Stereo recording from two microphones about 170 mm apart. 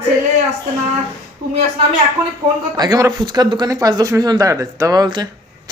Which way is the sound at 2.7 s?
20° right (ahead or behind).